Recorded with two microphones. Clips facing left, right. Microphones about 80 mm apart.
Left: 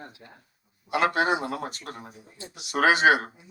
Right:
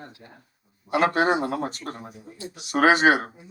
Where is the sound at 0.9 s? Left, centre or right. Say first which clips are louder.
Right 3 dB; right.